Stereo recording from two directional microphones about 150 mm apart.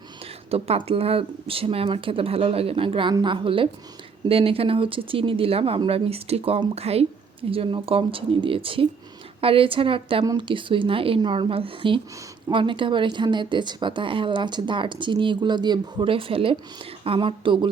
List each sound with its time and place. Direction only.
0.5 s speech: 40° right (ahead or behind)